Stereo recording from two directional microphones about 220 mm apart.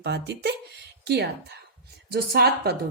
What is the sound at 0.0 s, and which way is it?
Speech, 50° right (ahead or behind).